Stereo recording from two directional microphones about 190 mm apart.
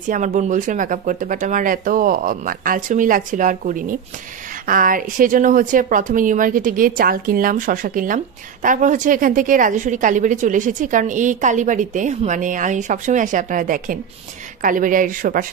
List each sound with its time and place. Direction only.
0.1 s a woman's voice: 40° right (ahead or behind)